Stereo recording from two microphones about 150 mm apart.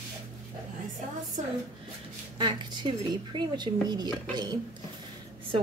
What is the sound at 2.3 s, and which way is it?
A woman's voice, 30° right (ahead or behind).